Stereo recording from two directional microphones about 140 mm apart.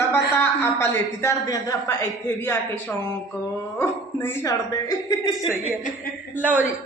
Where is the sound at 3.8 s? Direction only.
15° left (ahead or behind); by 5.5 s 30° left (ahead or behind).